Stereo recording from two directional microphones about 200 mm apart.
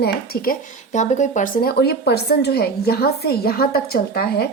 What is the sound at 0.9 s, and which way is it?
A woman's voice, 35° left (ahead or behind).